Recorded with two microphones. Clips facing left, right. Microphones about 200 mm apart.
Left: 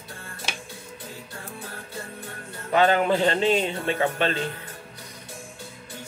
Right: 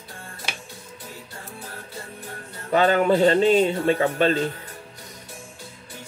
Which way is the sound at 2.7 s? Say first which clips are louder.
Right 2 dB; 40° right (ahead or behind).